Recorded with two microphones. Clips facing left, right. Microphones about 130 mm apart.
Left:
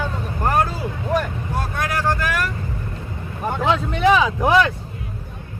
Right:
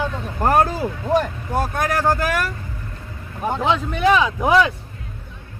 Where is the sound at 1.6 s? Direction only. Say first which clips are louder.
Right 4 dB; 45° right (ahead or behind).